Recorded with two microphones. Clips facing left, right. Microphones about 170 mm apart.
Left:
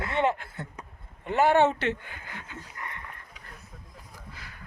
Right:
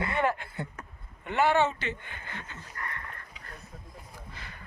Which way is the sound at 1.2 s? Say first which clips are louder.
Left 3 dB; 40° left (ahead or behind).